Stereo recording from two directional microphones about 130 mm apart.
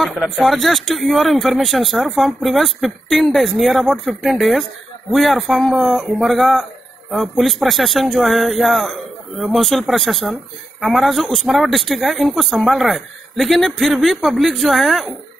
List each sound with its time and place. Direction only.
0.0 s speech: centre (ahead or behind)